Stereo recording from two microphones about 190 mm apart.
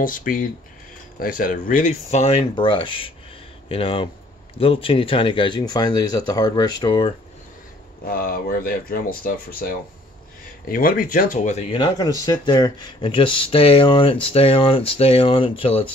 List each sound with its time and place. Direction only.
0.0 s speech: 45° left (ahead or behind); by 7.2 s 25° left (ahead or behind)
8.0 s speech: 50° left (ahead or behind); by 11.8 s 35° left (ahead or behind)
11.8 s speech: 20° left (ahead or behind)